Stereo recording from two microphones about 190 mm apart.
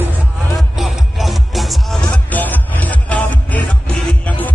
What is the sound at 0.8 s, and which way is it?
Music, centre (ahead or behind).